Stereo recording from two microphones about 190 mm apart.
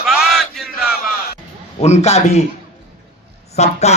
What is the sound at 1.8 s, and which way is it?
Speech, 35° left (ahead or behind).